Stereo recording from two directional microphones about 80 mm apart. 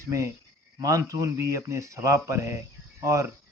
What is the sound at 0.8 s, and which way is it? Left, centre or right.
Speech, right.